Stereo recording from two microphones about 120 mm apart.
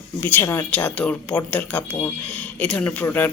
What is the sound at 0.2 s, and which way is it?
A woman's voice, 15° left (ahead or behind).